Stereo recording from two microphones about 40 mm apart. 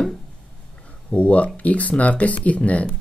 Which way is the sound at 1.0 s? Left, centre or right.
Left.